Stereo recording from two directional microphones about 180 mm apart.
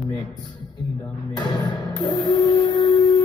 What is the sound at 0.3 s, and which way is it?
Speech, 25° left (ahead or behind).